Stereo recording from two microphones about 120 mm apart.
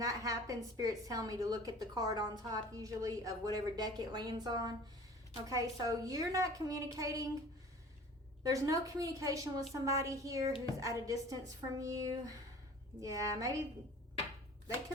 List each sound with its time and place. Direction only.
0.0 s a woman's voice: 30° right (ahead or behind)
8.4 s a woman's voice: 30° right (ahead or behind)